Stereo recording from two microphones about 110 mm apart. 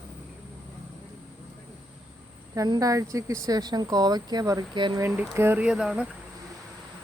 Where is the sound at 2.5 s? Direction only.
35° right (ahead or behind).